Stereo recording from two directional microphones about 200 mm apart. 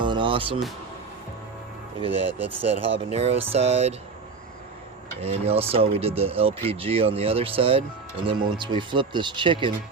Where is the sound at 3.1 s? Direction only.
30° right (ahead or behind).